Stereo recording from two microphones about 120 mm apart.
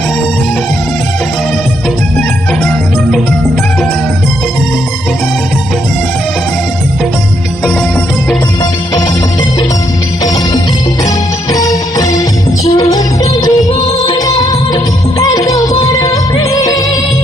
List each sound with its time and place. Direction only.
11.5 s music: 30° left (ahead or behind)